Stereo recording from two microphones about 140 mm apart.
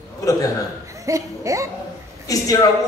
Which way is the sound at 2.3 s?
25° left (ahead or behind).